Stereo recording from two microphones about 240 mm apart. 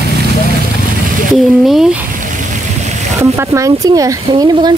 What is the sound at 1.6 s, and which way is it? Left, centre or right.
Speech, centre.